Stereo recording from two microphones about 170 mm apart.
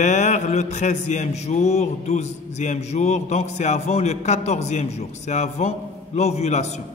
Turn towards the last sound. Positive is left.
turn(degrees=40)  # may be behind; listen again after turning